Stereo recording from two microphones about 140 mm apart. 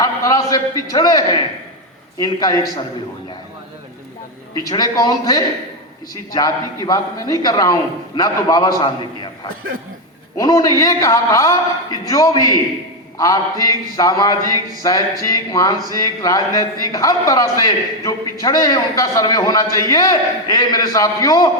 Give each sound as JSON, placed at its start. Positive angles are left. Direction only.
{"t": 0.0, "sound": "a sound", "side_deg": 25}
{"t": 2.1, "sound": "a man's voice", "side_deg": 25}
{"t": 4.6, "sound": "a man's voice", "side_deg": 25}